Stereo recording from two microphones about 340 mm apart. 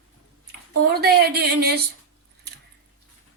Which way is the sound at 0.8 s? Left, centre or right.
Right.